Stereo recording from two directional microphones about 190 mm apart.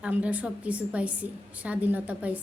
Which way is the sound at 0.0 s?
5° right (ahead or behind).